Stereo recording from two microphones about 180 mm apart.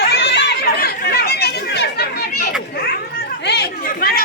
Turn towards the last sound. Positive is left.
turn(degrees=55)  # may be behind; listen again after turning